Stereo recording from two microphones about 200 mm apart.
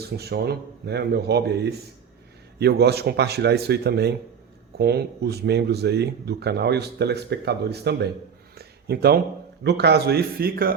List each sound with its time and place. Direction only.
0.0 s speech: 55° right (ahead or behind)
8.5 s a sound: 50° right (ahead or behind)
9.6 s speech: 55° right (ahead or behind)